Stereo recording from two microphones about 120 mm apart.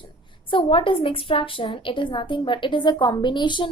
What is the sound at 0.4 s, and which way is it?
A woman's voice, 45° left (ahead or behind).